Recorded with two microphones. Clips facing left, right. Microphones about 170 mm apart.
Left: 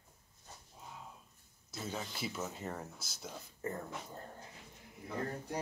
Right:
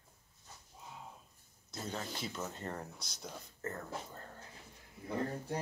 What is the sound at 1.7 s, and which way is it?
Speech, 5° left (ahead or behind).